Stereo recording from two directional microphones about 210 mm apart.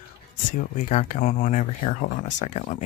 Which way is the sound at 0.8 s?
40° left (ahead or behind).